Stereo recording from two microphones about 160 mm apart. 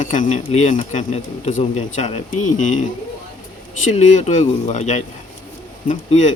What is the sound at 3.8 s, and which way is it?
Speech, 50° left (ahead or behind).